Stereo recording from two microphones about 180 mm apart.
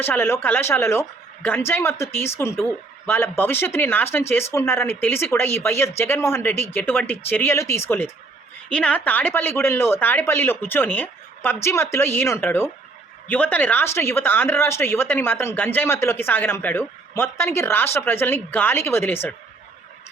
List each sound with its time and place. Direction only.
0.0 s speech: 10° left (ahead or behind)